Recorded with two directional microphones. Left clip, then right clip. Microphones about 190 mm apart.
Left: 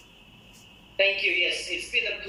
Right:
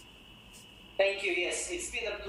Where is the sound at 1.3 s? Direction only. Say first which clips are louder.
Left 7 dB; 10° left (ahead or behind).